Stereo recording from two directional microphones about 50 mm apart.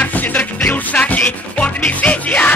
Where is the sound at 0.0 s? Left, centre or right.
Left.